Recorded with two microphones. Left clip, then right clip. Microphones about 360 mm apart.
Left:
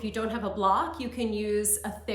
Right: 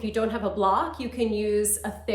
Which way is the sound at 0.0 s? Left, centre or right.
Centre.